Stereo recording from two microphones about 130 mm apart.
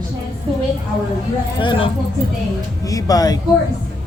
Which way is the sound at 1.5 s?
40° left (ahead or behind).